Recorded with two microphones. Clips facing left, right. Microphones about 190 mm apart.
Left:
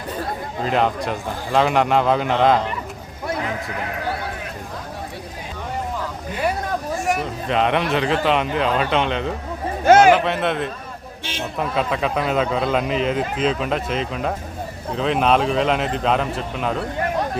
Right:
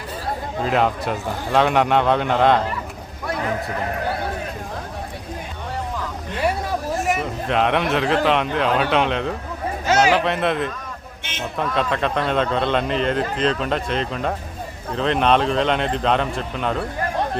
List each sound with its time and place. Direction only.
0.6 s speech: centre (ahead or behind)
7.0 s speech: centre (ahead or behind)
9.8 s speech: 55° left (ahead or behind)
10.1 s speech: centre (ahead or behind)
11.2 s a sound: 35° left (ahead or behind)
11.6 s speech: 5° left (ahead or behind)